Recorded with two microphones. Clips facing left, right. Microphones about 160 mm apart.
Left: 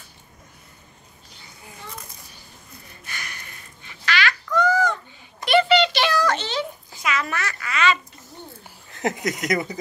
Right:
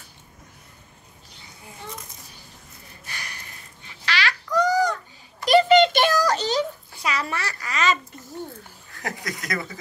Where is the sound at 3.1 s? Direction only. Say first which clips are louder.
Left 1 dB; 30° right (ahead or behind).